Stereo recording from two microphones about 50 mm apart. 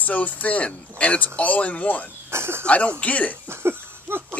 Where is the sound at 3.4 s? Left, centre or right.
Right.